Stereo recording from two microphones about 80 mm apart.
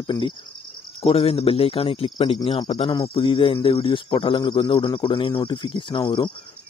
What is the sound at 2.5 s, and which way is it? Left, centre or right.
Speech, left.